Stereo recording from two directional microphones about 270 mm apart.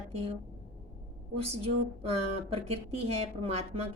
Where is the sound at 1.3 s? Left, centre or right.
Right.